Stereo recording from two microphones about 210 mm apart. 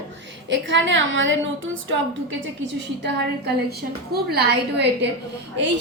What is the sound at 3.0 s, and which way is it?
A woman's voice, 50° right (ahead or behind).